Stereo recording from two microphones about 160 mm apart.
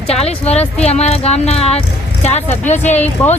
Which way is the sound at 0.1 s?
40° left (ahead or behind).